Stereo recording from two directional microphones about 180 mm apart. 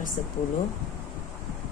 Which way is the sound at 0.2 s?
45° left (ahead or behind).